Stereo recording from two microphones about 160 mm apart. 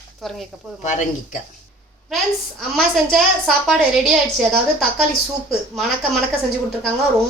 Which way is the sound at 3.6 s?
Centre (ahead or behind).